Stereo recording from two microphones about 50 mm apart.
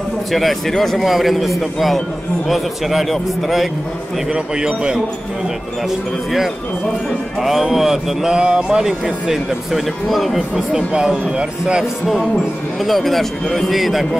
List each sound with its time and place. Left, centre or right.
0.3 s a man's voice: centre
4.3 s speech: centre
5.9 s speech: centre
9.3 s a man's voice: centre
10.7 s speech: centre
12.8 s a man's voice: centre